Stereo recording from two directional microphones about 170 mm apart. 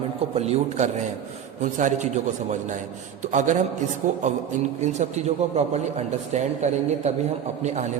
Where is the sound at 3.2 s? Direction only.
45° right (ahead or behind).